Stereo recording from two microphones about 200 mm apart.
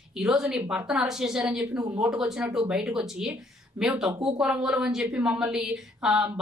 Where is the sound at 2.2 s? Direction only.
5° right (ahead or behind).